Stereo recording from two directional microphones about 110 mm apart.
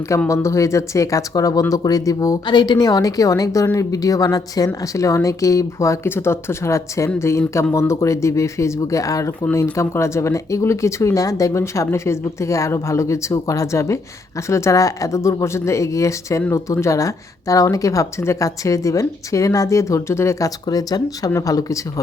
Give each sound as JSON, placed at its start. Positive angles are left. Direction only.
{"t": 0.3, "sound": "a woman's voice", "side_deg": 25}
{"t": 2.5, "sound": "a woman's voice", "side_deg": 45}